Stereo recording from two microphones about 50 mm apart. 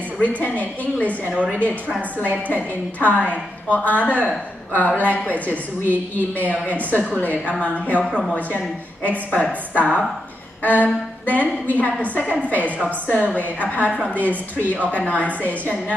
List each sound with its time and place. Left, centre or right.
0.2 s a woman's voice: left
2.0 s a woman's voice: right
2.4 s a woman's voice: left
9.0 s a woman's voice: left